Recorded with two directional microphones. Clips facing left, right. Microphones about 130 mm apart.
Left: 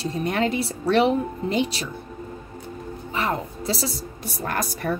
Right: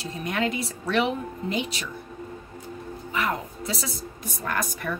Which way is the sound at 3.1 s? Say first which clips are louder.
Left 2 dB; 30° left (ahead or behind).